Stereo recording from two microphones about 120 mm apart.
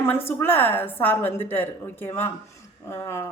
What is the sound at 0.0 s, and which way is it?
A woman's voice, 20° left (ahead or behind).